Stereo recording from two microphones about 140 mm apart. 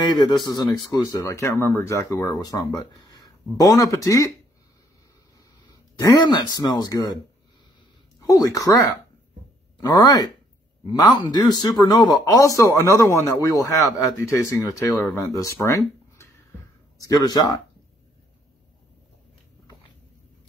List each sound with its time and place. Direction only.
0.2 s speech: 30° left (ahead or behind)
5.7 s speech: 25° left (ahead or behind)
8.2 s speech: 25° left (ahead or behind)